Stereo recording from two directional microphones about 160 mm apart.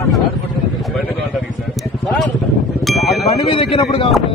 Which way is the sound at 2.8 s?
Centre (ahead or behind).